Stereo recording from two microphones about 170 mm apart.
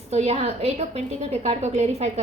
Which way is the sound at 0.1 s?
40° right (ahead or behind).